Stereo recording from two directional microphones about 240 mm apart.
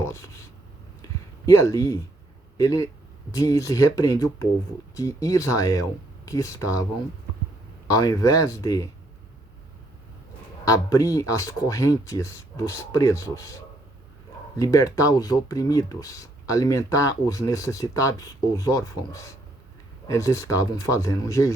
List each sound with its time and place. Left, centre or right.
0.0 s speech: centre
1.0 s a sound: centre
2.6 s speech: centre
7.9 s speech: centre
10.7 s speech: centre
14.6 s speech: centre